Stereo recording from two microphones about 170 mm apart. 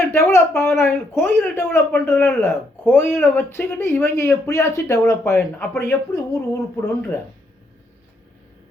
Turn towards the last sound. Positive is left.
turn(degrees=15)  # may be behind; listen again after turning